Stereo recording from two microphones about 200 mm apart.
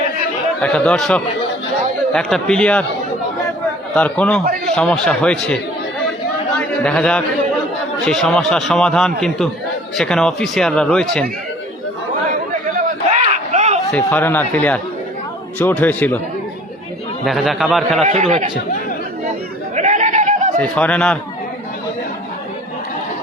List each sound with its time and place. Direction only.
0.6 s a man's voice: 5° left (ahead or behind)
3.9 s a man's voice: 5° left (ahead or behind)
6.6 s a man's voice: 5° left (ahead or behind)
13.3 s a sound: 35° right (ahead or behind)
13.9 s speech: 10° left (ahead or behind)
17.2 s a man's voice: centre (ahead or behind)
18.0 s a man's voice: 35° right (ahead or behind)
19.7 s goat: 35° right (ahead or behind)
20.6 s a man's voice: 5° left (ahead or behind)